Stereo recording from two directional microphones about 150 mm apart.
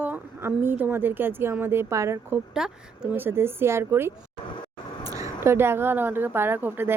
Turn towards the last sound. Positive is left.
turn(degrees=-15)  # may be behind; listen again after turning